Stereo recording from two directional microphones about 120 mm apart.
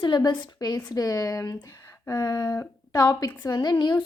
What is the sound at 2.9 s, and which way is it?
A woman's voice, 35° left (ahead or behind).